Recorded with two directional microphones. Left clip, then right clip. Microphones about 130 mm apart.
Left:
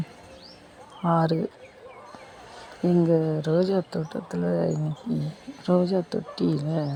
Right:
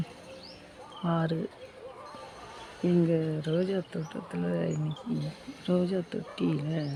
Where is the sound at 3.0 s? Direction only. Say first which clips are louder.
Left 8 dB; 15° left (ahead or behind).